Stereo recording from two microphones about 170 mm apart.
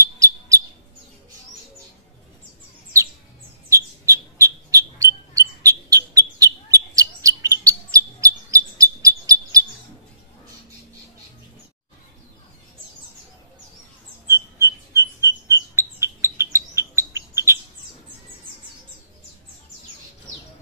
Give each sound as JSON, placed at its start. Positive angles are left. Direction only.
{"t": 0.0, "sound": "bird", "side_deg": -20}
{"t": 3.6, "sound": "bird", "side_deg": -15}
{"t": 14.2, "sound": "rodents", "side_deg": -15}